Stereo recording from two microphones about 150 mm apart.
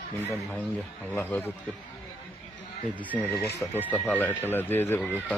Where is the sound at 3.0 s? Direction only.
10° right (ahead or behind).